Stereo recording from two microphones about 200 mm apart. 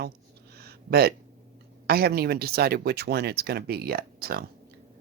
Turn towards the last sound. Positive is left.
turn(degrees=-45)  # may be behind; listen again after turning